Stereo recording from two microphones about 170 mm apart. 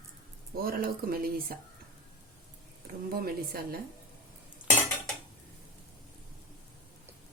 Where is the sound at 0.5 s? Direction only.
60° right (ahead or behind).